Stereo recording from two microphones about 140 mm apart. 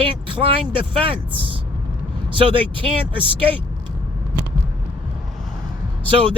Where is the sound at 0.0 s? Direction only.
40° right (ahead or behind).